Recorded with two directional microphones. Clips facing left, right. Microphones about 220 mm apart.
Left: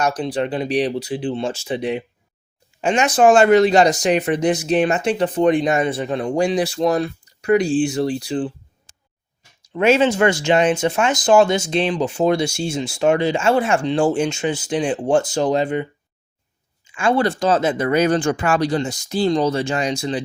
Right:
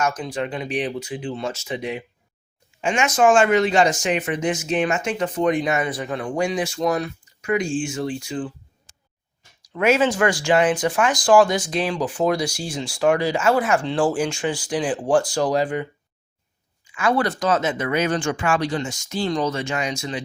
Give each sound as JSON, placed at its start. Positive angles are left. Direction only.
{"t": 0.0, "sound": "speech", "side_deg": 35}
{"t": 9.6, "sound": "speech", "side_deg": 25}